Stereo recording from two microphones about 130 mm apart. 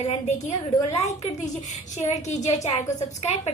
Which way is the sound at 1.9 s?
60° left (ahead or behind).